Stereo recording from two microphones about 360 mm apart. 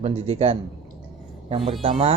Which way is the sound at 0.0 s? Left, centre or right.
Centre.